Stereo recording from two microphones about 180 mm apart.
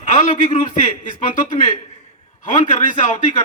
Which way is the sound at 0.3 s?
40° left (ahead or behind).